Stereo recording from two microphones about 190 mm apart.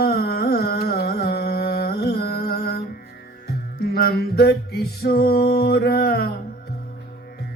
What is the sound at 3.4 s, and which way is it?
Music, 55° left (ahead or behind).